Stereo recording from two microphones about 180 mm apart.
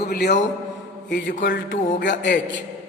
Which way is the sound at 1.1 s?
80° left.